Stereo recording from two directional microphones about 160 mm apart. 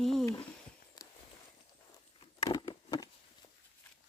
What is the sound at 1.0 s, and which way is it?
Walk, 25° left (ahead or behind).